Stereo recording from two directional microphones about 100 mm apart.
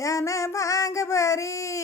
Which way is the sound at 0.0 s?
35° left (ahead or behind).